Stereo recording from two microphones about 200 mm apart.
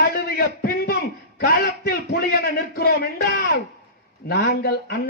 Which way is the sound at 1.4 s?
50° left (ahead or behind).